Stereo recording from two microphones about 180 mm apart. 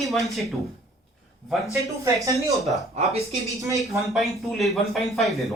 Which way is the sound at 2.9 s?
35° right (ahead or behind).